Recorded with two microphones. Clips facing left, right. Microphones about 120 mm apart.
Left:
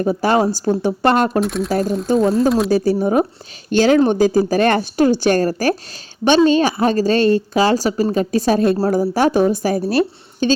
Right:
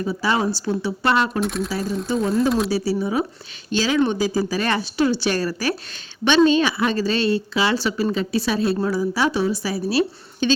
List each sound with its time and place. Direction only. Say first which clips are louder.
0.0 s a woman's voice: left 6 dB; 50° left (ahead or behind)
1.4 s speech: left 5 dB; centre (ahead or behind)
2.6 s a woman's voice: left 6 dB; 50° left (ahead or behind)